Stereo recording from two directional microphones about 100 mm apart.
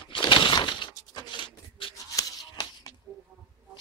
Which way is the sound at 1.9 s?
40° left (ahead or behind).